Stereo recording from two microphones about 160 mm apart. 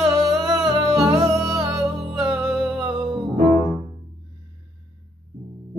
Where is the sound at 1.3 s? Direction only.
25° right (ahead or behind).